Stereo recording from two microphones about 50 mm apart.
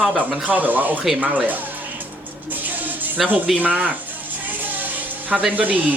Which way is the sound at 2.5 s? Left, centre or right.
Right.